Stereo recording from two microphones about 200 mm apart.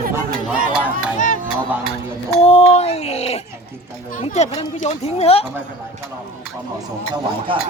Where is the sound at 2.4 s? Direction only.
30° left (ahead or behind).